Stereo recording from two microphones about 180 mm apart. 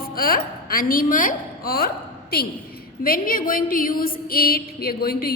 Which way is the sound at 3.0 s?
55° left (ahead or behind).